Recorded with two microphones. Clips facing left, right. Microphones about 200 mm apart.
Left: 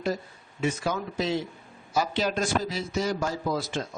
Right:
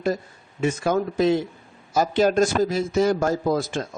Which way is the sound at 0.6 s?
50° right (ahead or behind).